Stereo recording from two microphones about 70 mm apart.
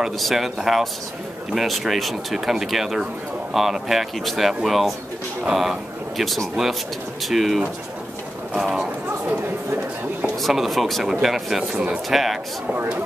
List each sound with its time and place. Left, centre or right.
0.0 s speech: centre
10.4 s speech: centre
12.7 s speech: centre